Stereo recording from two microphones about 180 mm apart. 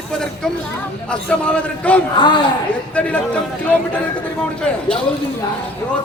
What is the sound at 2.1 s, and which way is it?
Speech, 25° left (ahead or behind).